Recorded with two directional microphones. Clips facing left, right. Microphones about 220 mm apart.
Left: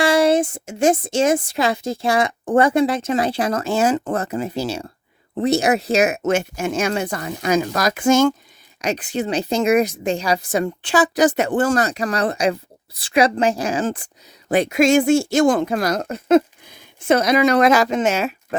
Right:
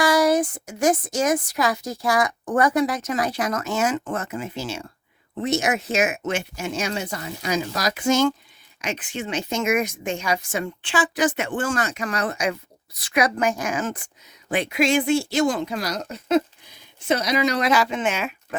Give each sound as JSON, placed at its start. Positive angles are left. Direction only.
{"t": 0.0, "sound": "a woman's voice", "side_deg": 25}
{"t": 8.8, "sound": "speech", "side_deg": 40}
{"t": 14.5, "sound": "speech", "side_deg": 45}